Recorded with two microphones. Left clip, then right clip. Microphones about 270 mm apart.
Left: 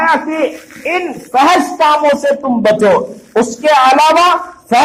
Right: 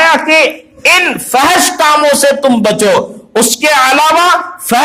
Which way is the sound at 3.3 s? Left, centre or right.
Right.